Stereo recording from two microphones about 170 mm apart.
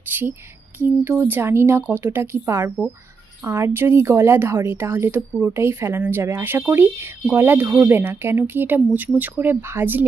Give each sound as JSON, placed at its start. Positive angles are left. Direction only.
{"t": 0.1, "sound": "a woman's voice", "side_deg": -10}